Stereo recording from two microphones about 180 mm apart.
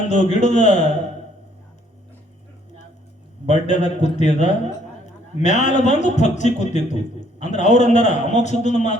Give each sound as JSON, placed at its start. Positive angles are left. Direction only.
{"t": 0.1, "sound": "a man's voice", "side_deg": 40}
{"t": 3.4, "sound": "a man's voice", "side_deg": 40}